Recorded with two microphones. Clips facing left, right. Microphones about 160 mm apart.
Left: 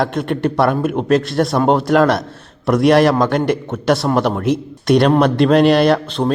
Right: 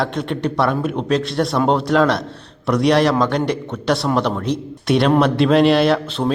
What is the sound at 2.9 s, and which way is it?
Speech, 50° left (ahead or behind).